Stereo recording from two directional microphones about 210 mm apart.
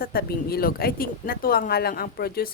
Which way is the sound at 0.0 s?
45° left (ahead or behind).